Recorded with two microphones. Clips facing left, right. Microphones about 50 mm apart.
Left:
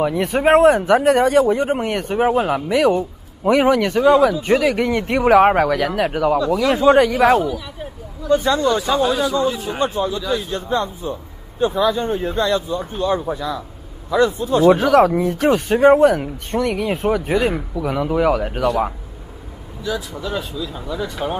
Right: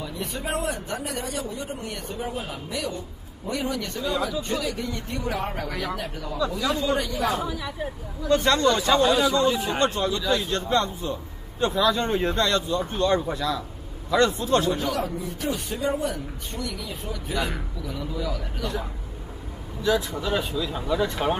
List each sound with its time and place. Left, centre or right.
0.0 s a man's voice: left
8.3 s speech: centre
15.0 s a man's voice: left
19.8 s speech: centre